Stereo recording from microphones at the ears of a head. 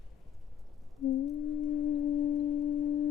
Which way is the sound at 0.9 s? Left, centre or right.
Left.